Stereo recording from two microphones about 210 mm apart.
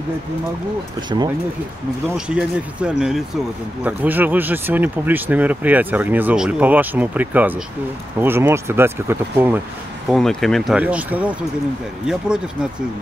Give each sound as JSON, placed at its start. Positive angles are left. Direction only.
{"t": 1.1, "sound": "speech", "side_deg": -20}
{"t": 2.1, "sound": "speech", "side_deg": -5}
{"t": 10.0, "sound": "speech", "side_deg": 0}